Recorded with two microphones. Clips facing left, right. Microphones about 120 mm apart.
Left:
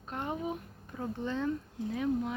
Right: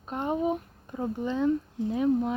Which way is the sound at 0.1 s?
20° right (ahead or behind).